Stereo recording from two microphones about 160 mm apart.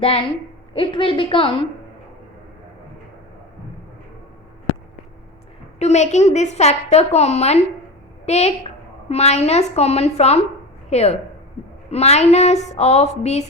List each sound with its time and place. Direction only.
0.7 s a woman's voice: 30° left (ahead or behind)
5.8 s a woman's voice: 45° left (ahead or behind)